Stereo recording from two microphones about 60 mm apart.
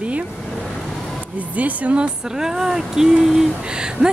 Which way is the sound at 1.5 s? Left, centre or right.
Right.